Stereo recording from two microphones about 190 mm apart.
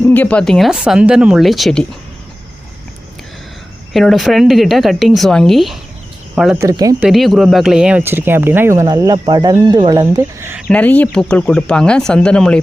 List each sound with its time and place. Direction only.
0.1 s speech: 5° left (ahead or behind)
3.9 s speech: centre (ahead or behind)
6.6 s speech: 20° right (ahead or behind)
7.0 s speech: centre (ahead or behind)
10.7 s speech: 10° left (ahead or behind)